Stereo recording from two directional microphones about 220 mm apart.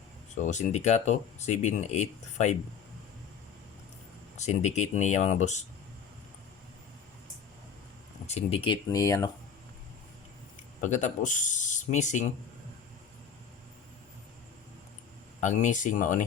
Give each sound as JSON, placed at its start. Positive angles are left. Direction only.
{"t": 0.3, "sound": "speech", "side_deg": 35}
{"t": 4.4, "sound": "speech", "side_deg": 30}
{"t": 8.3, "sound": "speech", "side_deg": 30}
{"t": 10.8, "sound": "speech", "side_deg": 35}
{"t": 15.4, "sound": "speech", "side_deg": 35}